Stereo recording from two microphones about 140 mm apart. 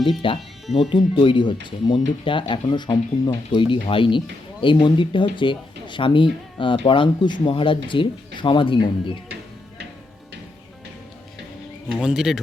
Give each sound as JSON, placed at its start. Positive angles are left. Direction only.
{"t": 0.2, "sound": "speech", "side_deg": 35}
{"t": 11.9, "sound": "speech", "side_deg": -5}